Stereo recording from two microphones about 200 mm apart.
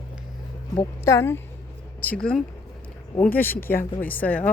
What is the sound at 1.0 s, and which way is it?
Speech, 15° left (ahead or behind).